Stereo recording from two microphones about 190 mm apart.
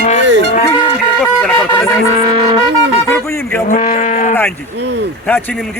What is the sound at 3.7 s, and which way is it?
Cattle, 45° left (ahead or behind).